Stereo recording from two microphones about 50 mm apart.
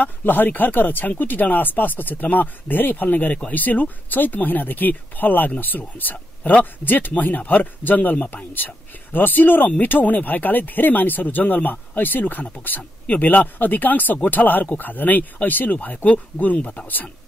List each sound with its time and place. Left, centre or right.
0.0 s speech: left
16.8 s speech: left